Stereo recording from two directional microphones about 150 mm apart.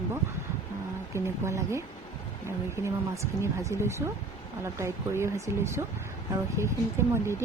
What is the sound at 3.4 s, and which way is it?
Speech, 20° right (ahead or behind).